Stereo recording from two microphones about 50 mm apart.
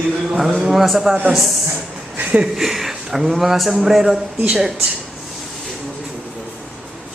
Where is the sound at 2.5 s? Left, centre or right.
Centre.